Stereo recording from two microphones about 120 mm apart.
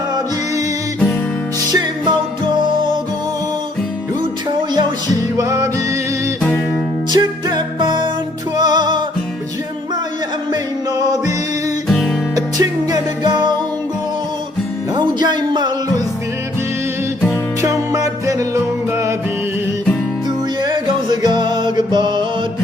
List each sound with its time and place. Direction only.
1.7 s music: 40° right (ahead or behind)
4.7 s music: 35° right (ahead or behind)
7.1 s music: 35° right (ahead or behind)
11.9 s music: 5° left (ahead or behind)
12.5 s music: 35° right (ahead or behind)
14.9 s music: 35° right (ahead or behind)
17.6 s music: 25° right (ahead or behind)
20.6 s music: 40° right (ahead or behind)